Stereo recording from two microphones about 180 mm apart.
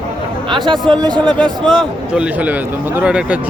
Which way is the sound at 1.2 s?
5° left (ahead or behind).